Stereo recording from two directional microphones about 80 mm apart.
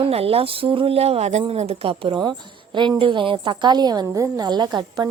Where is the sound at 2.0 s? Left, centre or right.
Right.